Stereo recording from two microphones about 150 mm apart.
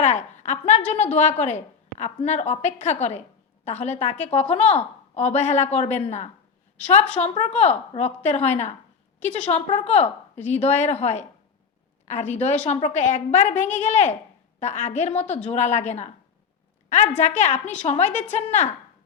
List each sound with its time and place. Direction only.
0.0 s a woman's voice: 50° left (ahead or behind)